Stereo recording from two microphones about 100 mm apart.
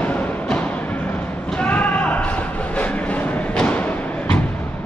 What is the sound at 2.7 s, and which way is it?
Thump, 15° left (ahead or behind).